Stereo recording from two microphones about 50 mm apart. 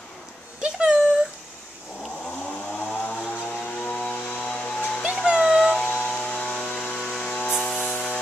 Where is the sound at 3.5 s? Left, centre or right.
Left.